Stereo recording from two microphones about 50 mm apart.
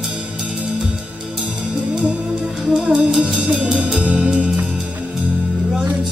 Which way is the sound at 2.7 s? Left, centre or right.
Centre.